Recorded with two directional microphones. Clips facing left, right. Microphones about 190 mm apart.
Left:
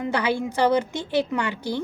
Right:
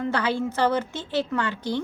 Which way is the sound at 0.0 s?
15° left (ahead or behind).